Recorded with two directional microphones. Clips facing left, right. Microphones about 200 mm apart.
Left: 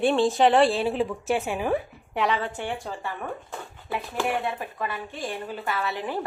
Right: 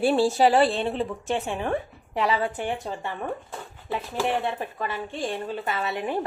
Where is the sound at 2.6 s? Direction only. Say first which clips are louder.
Right 2 dB; 20° right (ahead or behind).